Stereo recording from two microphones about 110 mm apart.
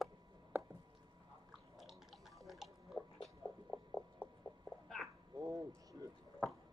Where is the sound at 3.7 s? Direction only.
15° left (ahead or behind).